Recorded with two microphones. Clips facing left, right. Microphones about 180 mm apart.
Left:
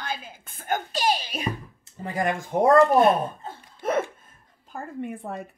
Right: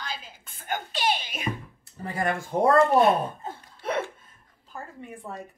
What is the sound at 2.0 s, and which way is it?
Speech, 15° left (ahead or behind).